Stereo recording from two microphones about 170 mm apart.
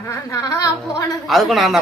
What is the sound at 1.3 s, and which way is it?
Speech, centre (ahead or behind).